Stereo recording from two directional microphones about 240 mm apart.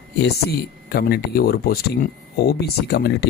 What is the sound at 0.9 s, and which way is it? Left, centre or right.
Speech, left.